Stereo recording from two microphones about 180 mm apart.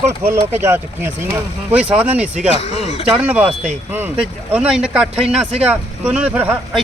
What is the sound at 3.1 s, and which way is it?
Speech, 10° right (ahead or behind).